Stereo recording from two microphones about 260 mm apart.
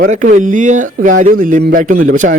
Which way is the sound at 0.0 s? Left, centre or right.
Right.